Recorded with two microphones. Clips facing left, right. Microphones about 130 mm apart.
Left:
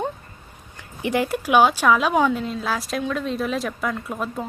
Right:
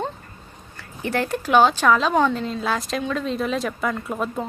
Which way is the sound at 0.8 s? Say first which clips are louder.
Left 2 dB; 15° left (ahead or behind).